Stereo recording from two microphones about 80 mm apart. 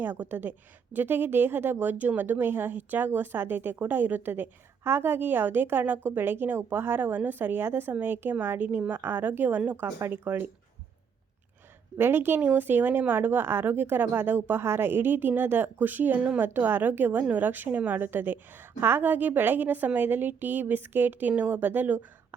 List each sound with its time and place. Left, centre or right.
0.0 s a woman's voice: right
9.8 s speech: right
10.2 s a woman's voice: right
11.9 s a woman's voice: right